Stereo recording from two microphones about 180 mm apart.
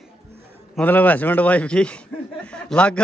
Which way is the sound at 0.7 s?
10° left (ahead or behind).